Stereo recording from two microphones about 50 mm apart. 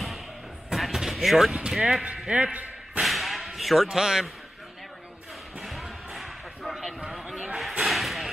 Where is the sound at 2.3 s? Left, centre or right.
Right.